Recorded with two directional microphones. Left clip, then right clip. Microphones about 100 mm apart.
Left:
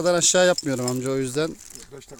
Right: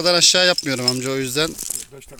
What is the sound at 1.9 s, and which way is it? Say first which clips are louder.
Speech: right 1 dB; 75° right (ahead or behind).